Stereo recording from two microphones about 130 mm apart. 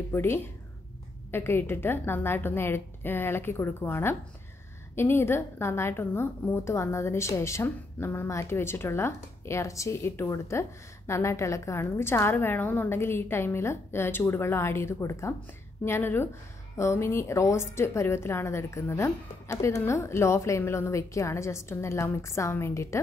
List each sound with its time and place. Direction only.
0.1 s a woman's voice: 20° left (ahead or behind)